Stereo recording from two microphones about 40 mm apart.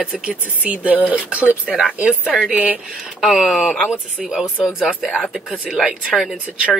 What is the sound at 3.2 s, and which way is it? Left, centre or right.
Speech, centre.